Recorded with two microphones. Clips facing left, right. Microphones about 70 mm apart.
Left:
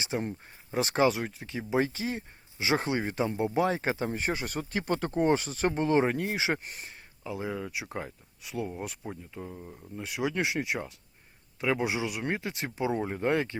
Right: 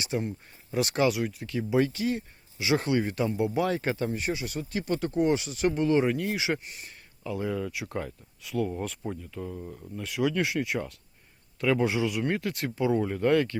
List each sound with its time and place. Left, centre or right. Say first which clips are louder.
0.0 s speech: right 1 dB; left
4.1 s speech: even; left
7.3 s speech: right 4 dB; centre